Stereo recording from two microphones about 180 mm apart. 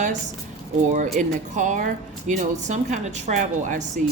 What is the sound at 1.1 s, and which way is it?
Speech, 45° right (ahead or behind).